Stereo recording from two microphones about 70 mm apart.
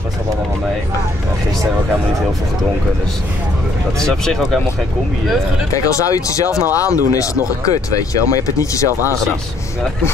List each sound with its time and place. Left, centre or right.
4.0 s speech: centre
5.7 s speech: left